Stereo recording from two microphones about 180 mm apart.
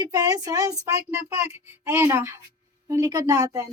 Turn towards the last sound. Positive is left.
turn(degrees=-20)  # may be behind; listen again after turning